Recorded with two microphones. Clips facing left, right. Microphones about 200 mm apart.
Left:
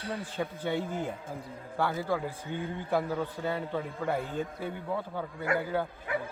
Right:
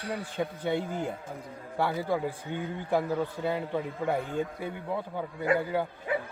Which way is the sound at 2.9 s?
15° right (ahead or behind).